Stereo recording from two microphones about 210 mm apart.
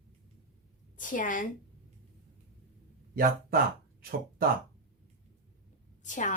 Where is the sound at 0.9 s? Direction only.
40° left (ahead or behind).